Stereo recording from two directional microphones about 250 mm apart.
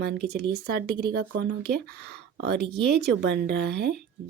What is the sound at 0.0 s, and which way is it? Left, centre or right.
A woman's voice, right.